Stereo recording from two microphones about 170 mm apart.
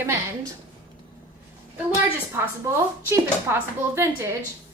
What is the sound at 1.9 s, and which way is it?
A woman's voice, 15° right (ahead or behind).